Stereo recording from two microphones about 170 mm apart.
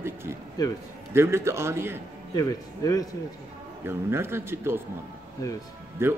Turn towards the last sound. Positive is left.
turn(degrees=-15)  # may be behind; listen again after turning